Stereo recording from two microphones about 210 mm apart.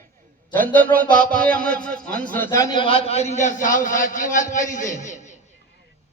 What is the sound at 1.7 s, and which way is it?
A man's voice, 5° left (ahead or behind).